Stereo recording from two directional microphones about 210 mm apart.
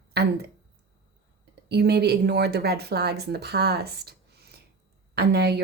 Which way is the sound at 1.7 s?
50° right (ahead or behind).